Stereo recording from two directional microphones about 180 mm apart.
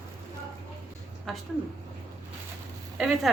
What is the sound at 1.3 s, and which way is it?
Speech, centre (ahead or behind).